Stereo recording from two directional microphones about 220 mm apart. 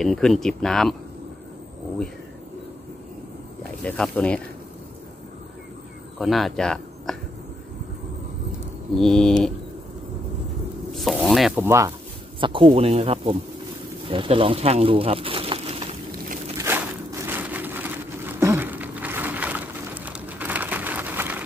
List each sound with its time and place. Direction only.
0.0 s speech: centre (ahead or behind)
3.8 s speech: 5° left (ahead or behind)
6.1 s speech: centre (ahead or behind)
8.9 s speech: centre (ahead or behind)
10.9 s speech: centre (ahead or behind)
12.4 s speech: 25° right (ahead or behind)
16.5 s a sound: 10° right (ahead or behind)